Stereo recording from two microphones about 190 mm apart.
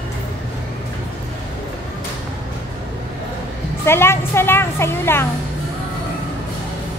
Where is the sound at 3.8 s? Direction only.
15° left (ahead or behind).